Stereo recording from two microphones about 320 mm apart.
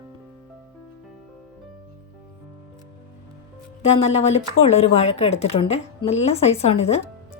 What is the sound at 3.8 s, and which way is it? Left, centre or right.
A woman's voice, centre.